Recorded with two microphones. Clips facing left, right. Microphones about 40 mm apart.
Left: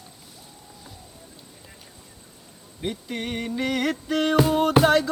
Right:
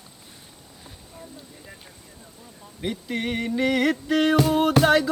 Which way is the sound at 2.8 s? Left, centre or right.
Centre.